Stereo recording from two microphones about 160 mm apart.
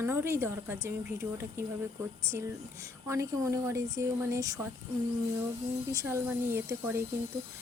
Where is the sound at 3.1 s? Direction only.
20° right (ahead or behind).